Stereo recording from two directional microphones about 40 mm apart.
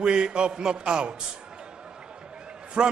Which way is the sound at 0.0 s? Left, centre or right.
Right.